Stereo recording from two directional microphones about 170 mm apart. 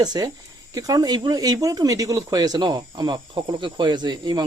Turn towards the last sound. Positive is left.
turn(degrees=-25)  # may be behind; listen again after turning